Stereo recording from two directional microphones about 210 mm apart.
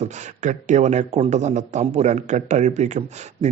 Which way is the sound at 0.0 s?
35° right (ahead or behind).